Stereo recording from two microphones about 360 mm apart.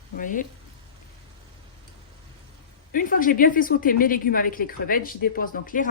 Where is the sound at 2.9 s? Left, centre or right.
Left.